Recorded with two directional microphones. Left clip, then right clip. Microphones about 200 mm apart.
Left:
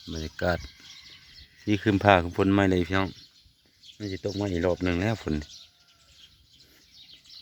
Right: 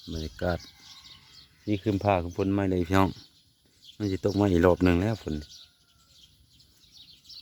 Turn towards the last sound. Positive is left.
turn(degrees=15)  # may be behind; listen again after turning